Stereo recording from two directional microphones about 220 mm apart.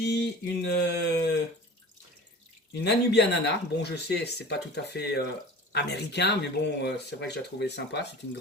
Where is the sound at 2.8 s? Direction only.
50° left (ahead or behind).